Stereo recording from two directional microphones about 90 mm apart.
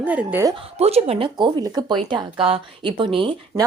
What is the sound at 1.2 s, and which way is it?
Speech, 60° right (ahead or behind).